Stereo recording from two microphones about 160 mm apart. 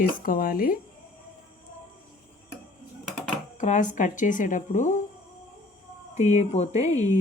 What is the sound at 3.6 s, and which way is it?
A woman's voice, 50° left (ahead or behind).